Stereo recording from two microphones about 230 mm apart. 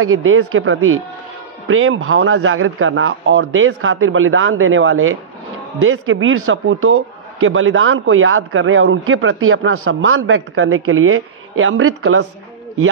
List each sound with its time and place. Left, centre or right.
0.0 s a man's voice: right